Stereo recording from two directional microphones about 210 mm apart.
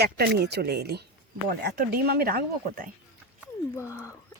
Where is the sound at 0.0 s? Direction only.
50° right (ahead or behind).